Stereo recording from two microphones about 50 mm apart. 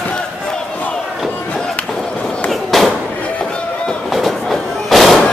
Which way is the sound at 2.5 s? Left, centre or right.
Centre.